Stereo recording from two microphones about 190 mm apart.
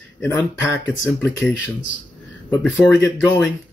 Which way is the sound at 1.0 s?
10° left (ahead or behind).